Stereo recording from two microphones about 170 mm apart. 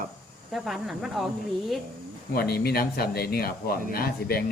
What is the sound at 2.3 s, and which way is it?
Speech, 65° left (ahead or behind).